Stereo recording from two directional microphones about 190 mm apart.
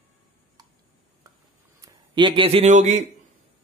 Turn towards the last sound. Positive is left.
turn(degrees=-40)  # may be behind; listen again after turning